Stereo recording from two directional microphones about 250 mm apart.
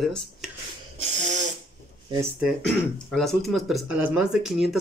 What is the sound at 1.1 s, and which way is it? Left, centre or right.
Sneeze, right.